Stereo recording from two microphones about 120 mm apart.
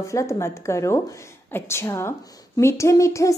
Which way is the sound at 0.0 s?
25° left (ahead or behind).